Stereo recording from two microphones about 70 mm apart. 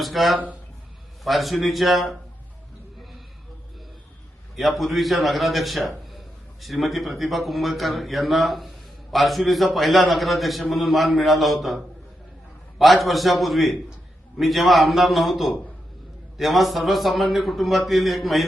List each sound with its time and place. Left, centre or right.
0.0 s a man's voice: centre
0.3 s speech: right
1.2 s a man's voice: centre
4.5 s a man's voice: centre
12.8 s a man's voice: centre